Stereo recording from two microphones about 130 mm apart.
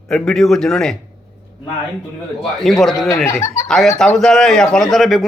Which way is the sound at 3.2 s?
20° left (ahead or behind).